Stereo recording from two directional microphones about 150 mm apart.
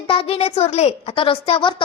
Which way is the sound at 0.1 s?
40° left (ahead or behind).